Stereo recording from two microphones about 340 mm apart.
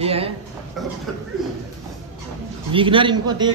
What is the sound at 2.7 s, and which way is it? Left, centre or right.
Speech, centre.